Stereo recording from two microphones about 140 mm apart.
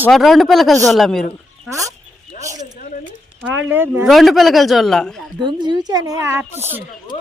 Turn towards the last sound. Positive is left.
turn(degrees=-15)  # may be behind; listen again after turning